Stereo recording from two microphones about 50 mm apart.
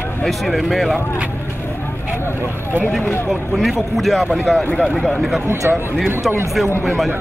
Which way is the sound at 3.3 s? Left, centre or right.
Centre.